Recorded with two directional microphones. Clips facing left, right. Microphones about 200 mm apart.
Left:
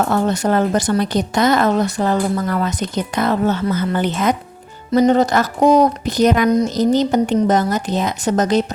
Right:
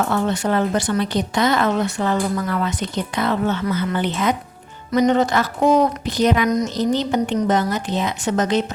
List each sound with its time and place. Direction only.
0.1 s speech: 40° left (ahead or behind)